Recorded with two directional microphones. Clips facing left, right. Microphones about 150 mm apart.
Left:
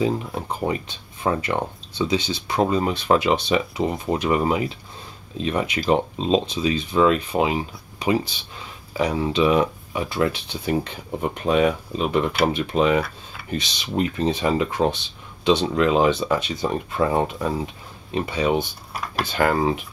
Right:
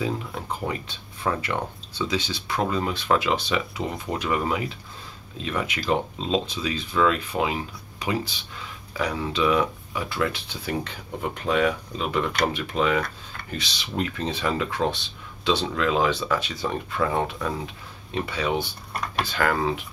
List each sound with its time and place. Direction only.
0.0 s speech: 25° left (ahead or behind)
13.0 s tick-tock: 5° left (ahead or behind)
13.5 s speech: 20° left (ahead or behind)
18.9 s speech: centre (ahead or behind)
19.2 s speech: 20° left (ahead or behind)